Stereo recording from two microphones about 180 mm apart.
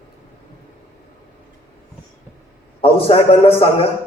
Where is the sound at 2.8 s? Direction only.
35° left (ahead or behind).